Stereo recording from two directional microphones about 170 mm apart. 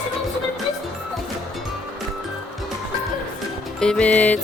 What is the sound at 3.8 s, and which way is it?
Music, 5° left (ahead or behind).